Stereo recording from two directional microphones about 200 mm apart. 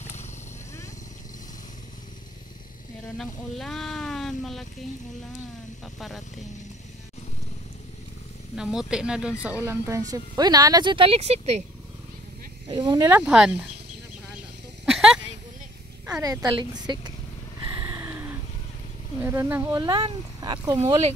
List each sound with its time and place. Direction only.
3.2 s speech: centre (ahead or behind)
5.9 s speech: centre (ahead or behind)
8.5 s speech: 5° right (ahead or behind); by 11.6 s 35° right (ahead or behind)
12.6 s speech: 20° right (ahead or behind)
13.2 s speech: 5° right (ahead or behind)
14.9 s snake: centre (ahead or behind)
16.2 s speech: 15° right (ahead or behind)
17.7 s vehicle: 15° right (ahead or behind)
19.2 s speech: 10° right (ahead or behind)
19.8 s speech: 20° right (ahead or behind)